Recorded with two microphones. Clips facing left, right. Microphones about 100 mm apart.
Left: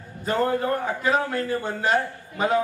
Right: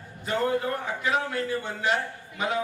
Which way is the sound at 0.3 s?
40° left (ahead or behind).